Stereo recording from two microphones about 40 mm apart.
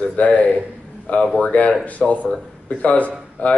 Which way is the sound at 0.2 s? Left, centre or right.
Left.